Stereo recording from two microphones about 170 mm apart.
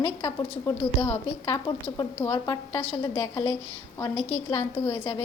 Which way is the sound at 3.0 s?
30° left (ahead or behind).